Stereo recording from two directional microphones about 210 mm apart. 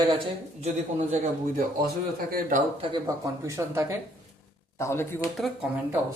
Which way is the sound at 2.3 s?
40° right (ahead or behind).